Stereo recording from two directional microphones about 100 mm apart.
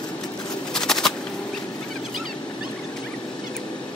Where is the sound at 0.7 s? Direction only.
5° left (ahead or behind).